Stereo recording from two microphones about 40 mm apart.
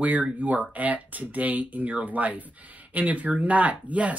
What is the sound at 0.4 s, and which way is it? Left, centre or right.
Speech, right.